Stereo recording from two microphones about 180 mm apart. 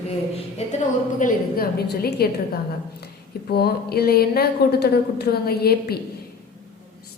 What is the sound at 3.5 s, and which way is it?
A woman's voice, 60° left (ahead or behind).